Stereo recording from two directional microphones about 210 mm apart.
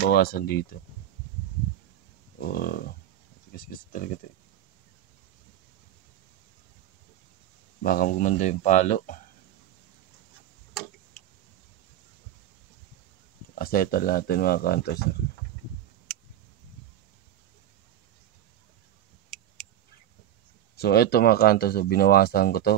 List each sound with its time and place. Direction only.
0.0 s speech: 45° left (ahead or behind)
2.4 s speech: 45° left (ahead or behind)
7.8 s speech: 45° left (ahead or behind)
13.6 s speech: 45° left (ahead or behind)
20.7 s speech: 50° left (ahead or behind)